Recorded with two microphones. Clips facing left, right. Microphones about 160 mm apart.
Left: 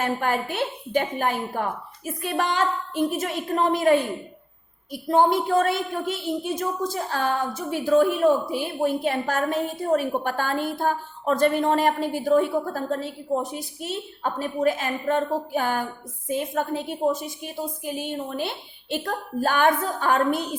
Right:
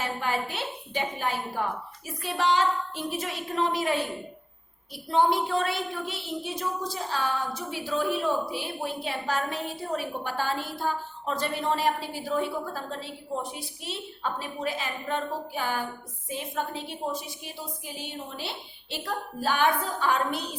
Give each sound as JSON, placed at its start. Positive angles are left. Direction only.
{"t": 0.0, "sound": "a woman's voice", "side_deg": 50}